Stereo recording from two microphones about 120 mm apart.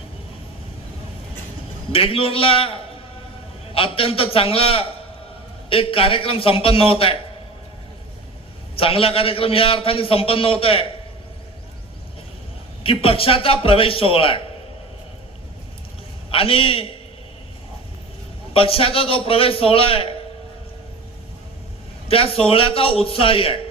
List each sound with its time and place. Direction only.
1.9 s a man's voice: 50° left (ahead or behind)
3.8 s a man's voice: 50° left (ahead or behind)
8.7 s a man's voice: 50° left (ahead or behind)
12.8 s a man's voice: 50° left (ahead or behind)
16.3 s a man's voice: 50° left (ahead or behind)
18.5 s a man's voice: 50° left (ahead or behind)
22.1 s a man's voice: 50° left (ahead or behind)